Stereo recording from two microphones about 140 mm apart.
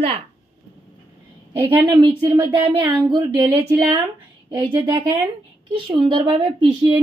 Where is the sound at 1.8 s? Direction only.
25° right (ahead or behind).